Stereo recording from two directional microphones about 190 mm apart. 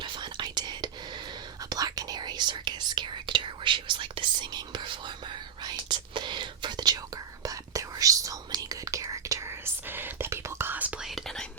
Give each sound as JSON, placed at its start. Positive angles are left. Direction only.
{"t": 0.0, "sound": "whispering", "side_deg": -25}